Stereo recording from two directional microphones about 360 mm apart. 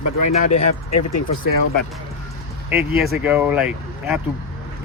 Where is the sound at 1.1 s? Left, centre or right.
Left.